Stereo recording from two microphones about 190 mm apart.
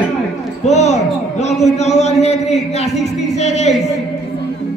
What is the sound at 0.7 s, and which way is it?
A man's voice, 35° left (ahead or behind).